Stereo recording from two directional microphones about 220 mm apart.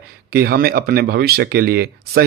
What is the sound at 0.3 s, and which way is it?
Speech, 45° right (ahead or behind).